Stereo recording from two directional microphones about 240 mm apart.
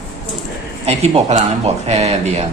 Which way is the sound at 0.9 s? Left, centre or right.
Right.